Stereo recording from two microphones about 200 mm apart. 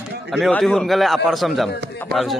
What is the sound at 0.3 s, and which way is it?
A man's voice, centre (ahead or behind).